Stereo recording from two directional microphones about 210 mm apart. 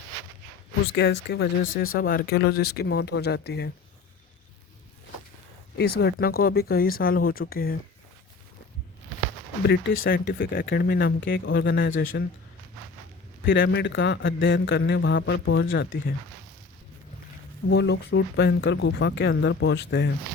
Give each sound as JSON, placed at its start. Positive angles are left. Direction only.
{"t": 0.9, "sound": "speech", "side_deg": 55}
{"t": 2.0, "sound": "speech", "side_deg": 45}
{"t": 5.7, "sound": "speech", "side_deg": 50}
{"t": 9.6, "sound": "a man's voice", "side_deg": 65}
{"t": 10.1, "sound": "a man's voice", "side_deg": 45}
{"t": 13.5, "sound": "a man's voice", "side_deg": 60}
{"t": 17.7, "sound": "a man's voice", "side_deg": 55}